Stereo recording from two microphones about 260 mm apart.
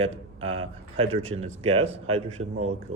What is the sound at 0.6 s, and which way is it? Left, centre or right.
A man's voice, right.